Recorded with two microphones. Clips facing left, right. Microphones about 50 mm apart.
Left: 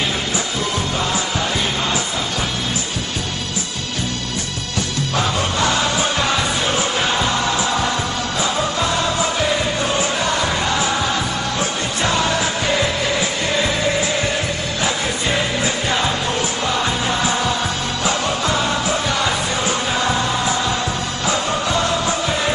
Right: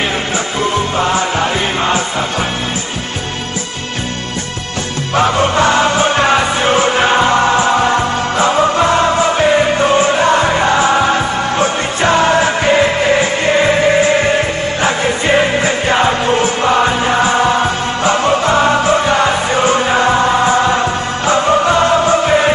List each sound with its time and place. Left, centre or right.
0.9 s music: right
5.1 s music: right